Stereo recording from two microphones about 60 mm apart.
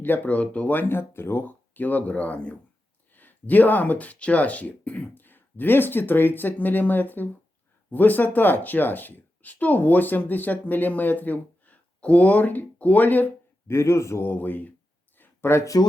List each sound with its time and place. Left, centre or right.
0.0 s speech: left
13.7 s a man's voice: left
14.3 s speech: left
15.2 s a sound: left